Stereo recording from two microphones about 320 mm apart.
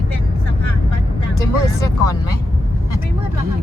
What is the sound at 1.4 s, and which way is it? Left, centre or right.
Music, centre.